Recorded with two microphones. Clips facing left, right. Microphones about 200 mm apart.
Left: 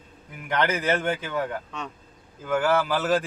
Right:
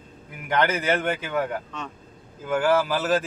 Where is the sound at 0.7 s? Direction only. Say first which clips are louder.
Even; 10° right (ahead or behind).